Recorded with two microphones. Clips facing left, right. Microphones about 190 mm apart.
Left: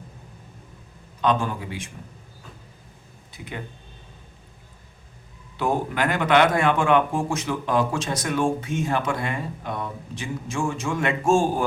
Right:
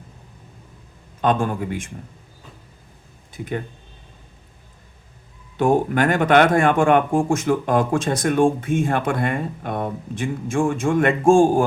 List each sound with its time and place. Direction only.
1.2 s speech: 50° right (ahead or behind)
3.3 s speech: 50° right (ahead or behind)
5.5 s speech: 50° right (ahead or behind)